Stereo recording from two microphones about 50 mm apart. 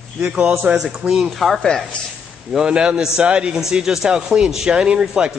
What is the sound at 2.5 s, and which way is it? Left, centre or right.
A man's voice, centre.